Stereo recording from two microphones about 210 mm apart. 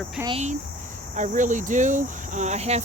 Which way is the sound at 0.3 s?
30° right (ahead or behind).